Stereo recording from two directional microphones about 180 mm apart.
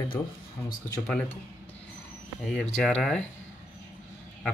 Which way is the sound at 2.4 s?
5° left (ahead or behind).